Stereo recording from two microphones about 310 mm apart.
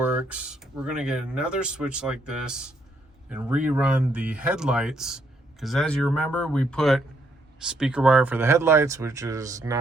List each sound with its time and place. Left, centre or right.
0.0 s speech: centre